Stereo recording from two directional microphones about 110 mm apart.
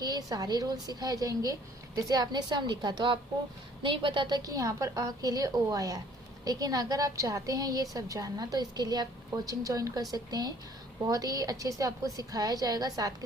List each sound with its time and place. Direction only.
0.0 s a woman's voice: 35° right (ahead or behind)
4.4 s a woman's voice: 30° right (ahead or behind)